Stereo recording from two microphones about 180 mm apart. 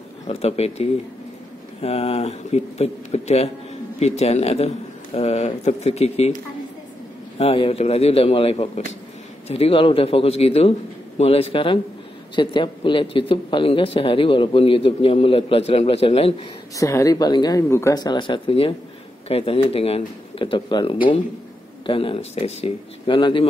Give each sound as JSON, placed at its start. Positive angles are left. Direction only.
{"t": 0.3, "sound": "speech", "side_deg": 35}
{"t": 7.3, "sound": "speech", "side_deg": 30}
{"t": 16.7, "sound": "speech", "side_deg": 20}